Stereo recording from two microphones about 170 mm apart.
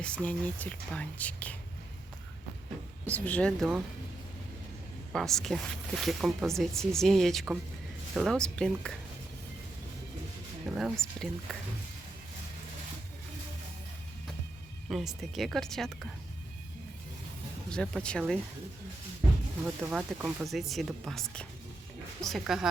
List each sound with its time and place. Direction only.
0.0 s speech: 5° left (ahead or behind)
3.1 s speech: 10° left (ahead or behind)
5.1 s speech: centre (ahead or behind)
10.8 s speech: centre (ahead or behind)
14.8 s speech: centre (ahead or behind)
17.7 s speech: 5° left (ahead or behind)
19.8 s speech: 5° right (ahead or behind)